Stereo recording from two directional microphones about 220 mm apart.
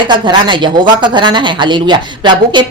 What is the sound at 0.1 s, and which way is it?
Speech, 20° right (ahead or behind).